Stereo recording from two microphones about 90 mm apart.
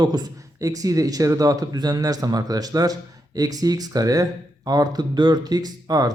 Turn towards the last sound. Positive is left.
turn(degrees=-45)  # may be behind; listen again after turning